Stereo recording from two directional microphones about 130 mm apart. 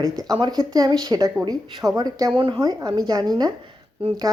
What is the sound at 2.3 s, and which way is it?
A woman's voice, 40° right (ahead or behind).